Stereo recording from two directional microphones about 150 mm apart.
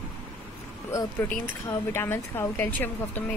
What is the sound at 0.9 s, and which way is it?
Speech, 20° left (ahead or behind).